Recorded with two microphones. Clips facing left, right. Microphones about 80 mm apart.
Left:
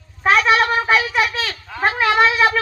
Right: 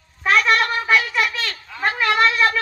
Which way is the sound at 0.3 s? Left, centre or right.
Left.